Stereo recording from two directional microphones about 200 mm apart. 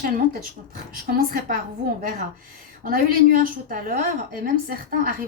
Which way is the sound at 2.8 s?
45° right (ahead or behind).